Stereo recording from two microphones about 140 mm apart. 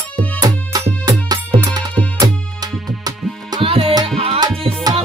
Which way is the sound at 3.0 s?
30° right (ahead or behind).